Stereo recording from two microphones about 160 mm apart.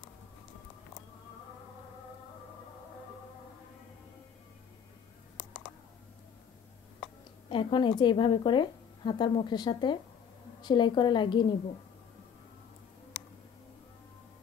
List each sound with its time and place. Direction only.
7.4 s a woman's voice: 30° left (ahead or behind)